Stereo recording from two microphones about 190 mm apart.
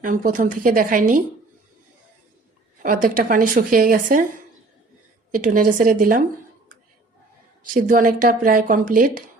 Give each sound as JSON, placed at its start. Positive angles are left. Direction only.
{"t": 0.0, "sound": "speech", "side_deg": -45}
{"t": 2.8, "sound": "speech", "side_deg": -45}
{"t": 5.3, "sound": "speech", "side_deg": -45}
{"t": 7.6, "sound": "speech", "side_deg": -45}